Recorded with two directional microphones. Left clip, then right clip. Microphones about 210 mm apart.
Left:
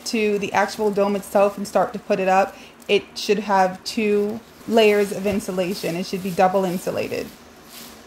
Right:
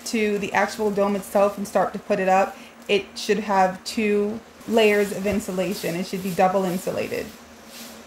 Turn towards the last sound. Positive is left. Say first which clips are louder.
# left 2 dB
turn(degrees=20)  # may be behind; listen again after turning